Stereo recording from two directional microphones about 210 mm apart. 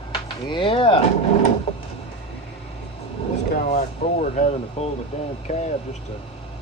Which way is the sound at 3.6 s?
35° left (ahead or behind).